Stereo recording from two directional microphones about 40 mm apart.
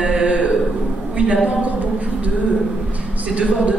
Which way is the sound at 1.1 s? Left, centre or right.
Right.